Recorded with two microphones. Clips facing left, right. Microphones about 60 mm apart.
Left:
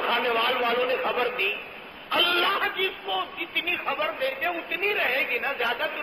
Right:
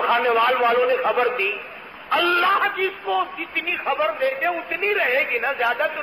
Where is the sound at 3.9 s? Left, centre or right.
Right.